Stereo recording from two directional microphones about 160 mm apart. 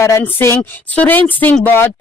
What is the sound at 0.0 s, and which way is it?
Speech, 15° left (ahead or behind).